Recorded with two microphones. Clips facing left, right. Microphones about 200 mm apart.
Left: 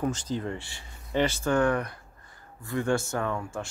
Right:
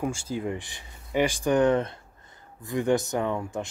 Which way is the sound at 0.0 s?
10° right (ahead or behind).